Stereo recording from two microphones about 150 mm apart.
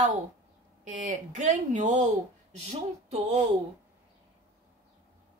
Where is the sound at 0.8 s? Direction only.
55° right (ahead or behind).